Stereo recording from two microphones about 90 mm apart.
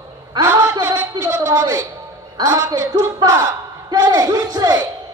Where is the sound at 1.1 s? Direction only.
45° right (ahead or behind).